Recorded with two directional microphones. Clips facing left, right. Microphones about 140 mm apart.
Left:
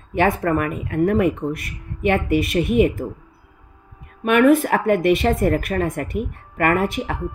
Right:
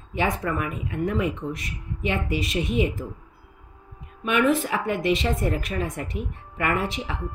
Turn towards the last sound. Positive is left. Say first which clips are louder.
# left 6 dB
turn(degrees=55)  # may be behind; listen again after turning